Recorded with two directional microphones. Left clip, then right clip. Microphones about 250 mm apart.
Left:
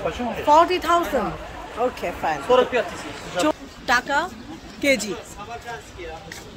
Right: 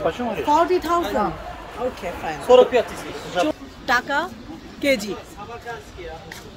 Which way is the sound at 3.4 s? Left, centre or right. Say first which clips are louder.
Even; centre.